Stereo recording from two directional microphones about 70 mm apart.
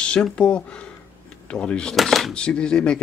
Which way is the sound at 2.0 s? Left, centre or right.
Centre.